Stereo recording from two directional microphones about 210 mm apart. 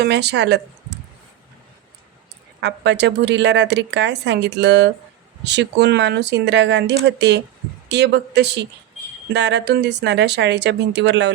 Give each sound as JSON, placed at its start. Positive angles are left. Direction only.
{"t": 0.0, "sound": "speech", "side_deg": -50}
{"t": 2.6, "sound": "speech", "side_deg": -55}